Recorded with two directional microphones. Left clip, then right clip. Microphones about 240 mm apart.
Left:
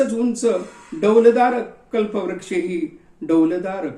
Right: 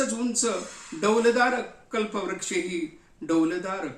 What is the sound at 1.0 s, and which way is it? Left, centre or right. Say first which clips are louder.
Speech: left 8 dB; centre.